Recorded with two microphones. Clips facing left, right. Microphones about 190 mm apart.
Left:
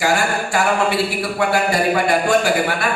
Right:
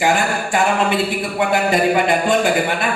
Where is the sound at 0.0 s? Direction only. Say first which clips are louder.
Right 1 dB; 20° right (ahead or behind).